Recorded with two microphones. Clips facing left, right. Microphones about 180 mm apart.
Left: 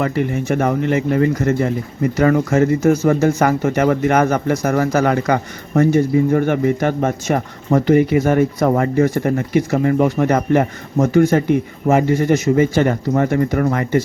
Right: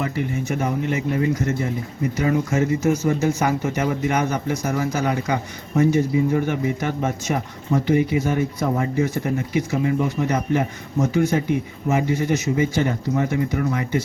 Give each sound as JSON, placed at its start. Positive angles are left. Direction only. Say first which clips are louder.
{"t": 0.5, "sound": "speech", "louder": "left 7 dB", "side_deg": 60}
{"t": 12.7, "sound": "speech", "louder": "left 5 dB", "side_deg": 70}